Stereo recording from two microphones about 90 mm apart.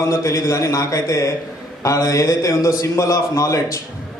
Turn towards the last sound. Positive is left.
turn(degrees=35)  # may be behind; listen again after turning